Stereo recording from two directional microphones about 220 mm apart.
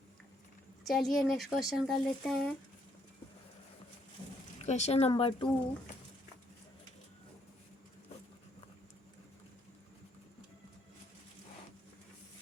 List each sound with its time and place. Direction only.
0.9 s speech: centre (ahead or behind)
4.6 s speech: 30° left (ahead or behind)